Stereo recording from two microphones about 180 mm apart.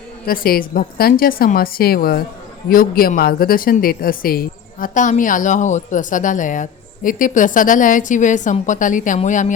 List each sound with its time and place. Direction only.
0.3 s a woman's voice: 55° left (ahead or behind)